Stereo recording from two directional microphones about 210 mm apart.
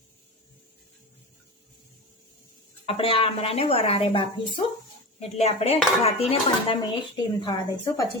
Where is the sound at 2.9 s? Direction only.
25° left (ahead or behind).